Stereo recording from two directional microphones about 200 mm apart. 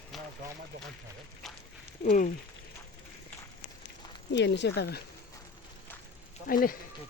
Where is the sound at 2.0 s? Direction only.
40° left (ahead or behind).